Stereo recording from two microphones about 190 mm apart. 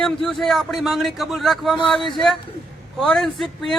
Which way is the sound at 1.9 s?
25° left (ahead or behind).